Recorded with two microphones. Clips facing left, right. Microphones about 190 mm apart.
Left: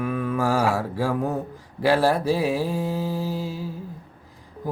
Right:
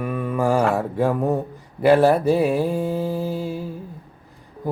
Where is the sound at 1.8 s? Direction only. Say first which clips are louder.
Right 5 dB; 55° right (ahead or behind).